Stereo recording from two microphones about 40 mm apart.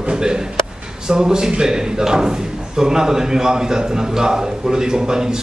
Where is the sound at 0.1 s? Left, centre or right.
Centre.